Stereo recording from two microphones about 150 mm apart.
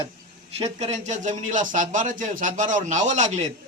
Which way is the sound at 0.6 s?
45° right (ahead or behind).